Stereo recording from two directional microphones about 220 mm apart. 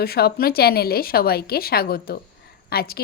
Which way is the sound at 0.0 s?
45° left (ahead or behind).